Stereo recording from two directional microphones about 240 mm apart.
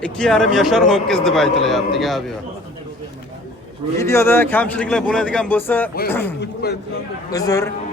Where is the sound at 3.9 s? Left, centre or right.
Centre.